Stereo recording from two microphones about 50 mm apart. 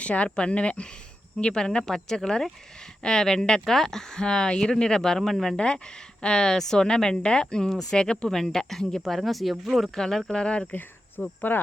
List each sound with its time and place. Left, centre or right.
0.0 s speech: left
8.3 s speech: centre
10.0 s speech: centre
10.7 s speech: left